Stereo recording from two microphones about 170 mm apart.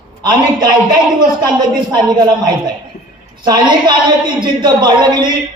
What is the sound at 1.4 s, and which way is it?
A man's voice, 25° right (ahead or behind).